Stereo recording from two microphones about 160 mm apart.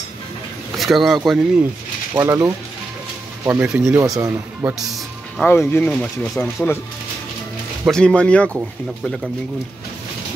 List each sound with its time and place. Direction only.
0.7 s speech: centre (ahead or behind)
2.1 s a man's voice: 15° right (ahead or behind)
4.0 s a man's voice: 20° right (ahead or behind)
4.7 s speech: centre (ahead or behind)
5.4 s speech: 10° left (ahead or behind)
7.8 s speech: 5° left (ahead or behind)